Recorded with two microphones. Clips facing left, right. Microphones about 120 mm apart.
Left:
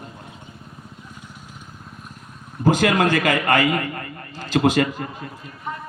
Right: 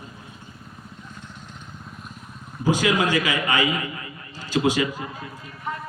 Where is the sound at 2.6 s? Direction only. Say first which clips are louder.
Left 3 dB; 55° left (ahead or behind).